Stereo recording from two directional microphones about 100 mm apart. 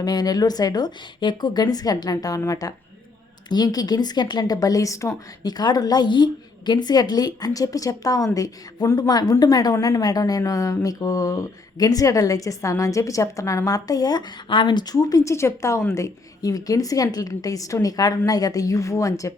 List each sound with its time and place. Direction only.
0.0 s a woman's voice: 40° left (ahead or behind)
5.4 s a woman's voice: 45° left (ahead or behind)